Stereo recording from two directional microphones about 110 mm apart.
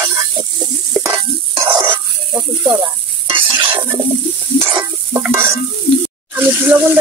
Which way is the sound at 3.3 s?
50° right (ahead or behind).